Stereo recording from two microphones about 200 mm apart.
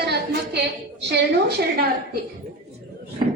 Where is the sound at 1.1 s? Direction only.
55° right (ahead or behind).